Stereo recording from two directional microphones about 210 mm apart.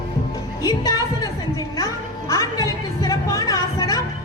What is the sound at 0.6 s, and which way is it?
Children playing, 20° left (ahead or behind).